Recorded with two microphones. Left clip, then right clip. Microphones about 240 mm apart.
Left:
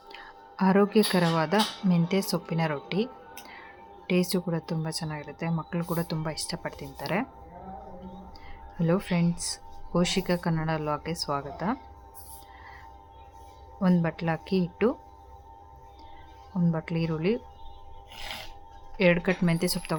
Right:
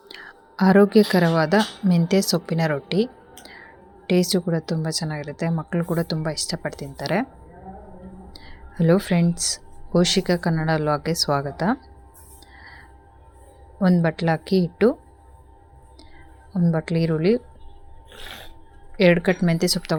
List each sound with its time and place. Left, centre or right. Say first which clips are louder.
0.1 s a woman's voice: right 4 dB; centre
8.3 s music: right 2 dB; centre
9.4 s a woman's voice: right 9 dB; centre
13.7 s a woman's voice: right 7 dB; centre
16.6 s a woman's voice: right 7 dB; centre
18.9 s a woman's voice: right 6 dB; centre